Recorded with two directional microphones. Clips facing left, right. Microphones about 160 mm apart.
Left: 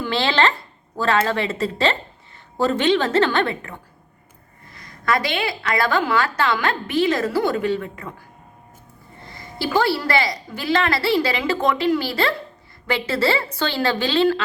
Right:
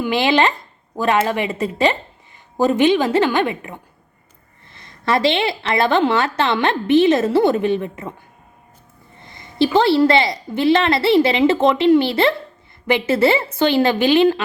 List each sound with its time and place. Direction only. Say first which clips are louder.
0.0 s a woman's voice: right 4 dB; 15° right (ahead or behind)
4.7 s a woman's voice: right 3 dB; 25° right (ahead or behind)
9.2 s a woman's voice: right 9 dB; 20° right (ahead or behind)